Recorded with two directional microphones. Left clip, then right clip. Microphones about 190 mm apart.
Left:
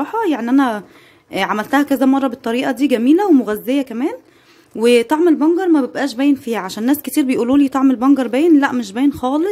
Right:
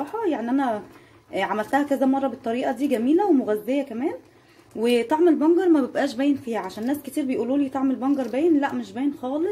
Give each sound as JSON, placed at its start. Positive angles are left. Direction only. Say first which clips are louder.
{"t": 0.0, "sound": "speech", "louder": "left 7 dB", "side_deg": 50}